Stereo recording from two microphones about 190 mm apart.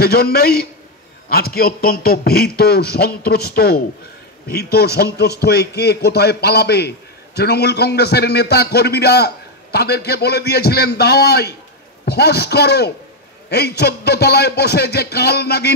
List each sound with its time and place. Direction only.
0.0 s a man's voice: 55° left (ahead or behind)